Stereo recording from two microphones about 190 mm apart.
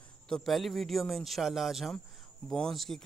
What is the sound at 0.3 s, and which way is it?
Speech, centre (ahead or behind).